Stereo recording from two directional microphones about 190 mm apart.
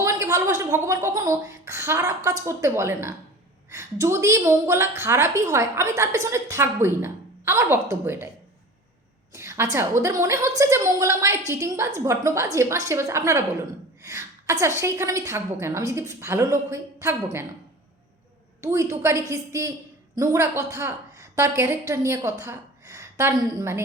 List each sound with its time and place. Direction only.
0.0 s a woman's voice: 15° right (ahead or behind)
9.3 s a sound: 15° right (ahead or behind)
9.7 s a woman's voice: 15° right (ahead or behind)
18.6 s a woman's voice: 15° right (ahead or behind)